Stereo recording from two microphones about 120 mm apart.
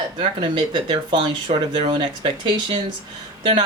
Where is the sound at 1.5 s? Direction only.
60° right (ahead or behind).